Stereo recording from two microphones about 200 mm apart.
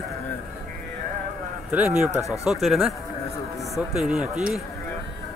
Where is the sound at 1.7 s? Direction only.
5° right (ahead or behind).